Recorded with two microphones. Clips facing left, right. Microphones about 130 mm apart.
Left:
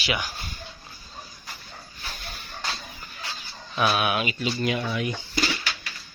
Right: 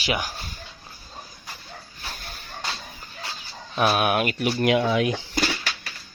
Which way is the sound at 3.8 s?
50° right (ahead or behind).